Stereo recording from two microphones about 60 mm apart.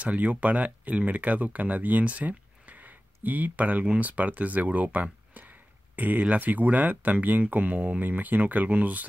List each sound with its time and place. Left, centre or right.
0.0 s speech: right